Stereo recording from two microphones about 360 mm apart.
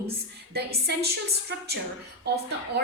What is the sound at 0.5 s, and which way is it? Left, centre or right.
A woman's voice, right.